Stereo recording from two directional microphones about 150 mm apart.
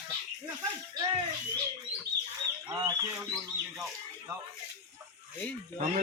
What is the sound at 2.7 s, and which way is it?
Speech, 25° right (ahead or behind).